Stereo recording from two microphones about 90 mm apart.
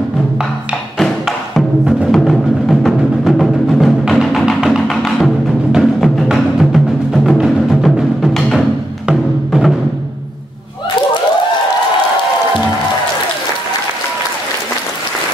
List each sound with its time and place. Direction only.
0.9 s music: 5° left (ahead or behind)